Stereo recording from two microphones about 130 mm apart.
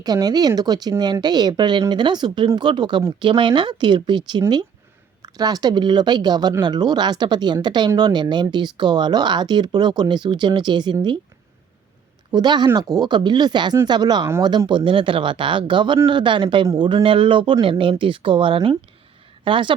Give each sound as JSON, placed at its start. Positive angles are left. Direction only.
{"t": 0.0, "sound": "speech", "side_deg": -30}
{"t": 12.3, "sound": "speech", "side_deg": -35}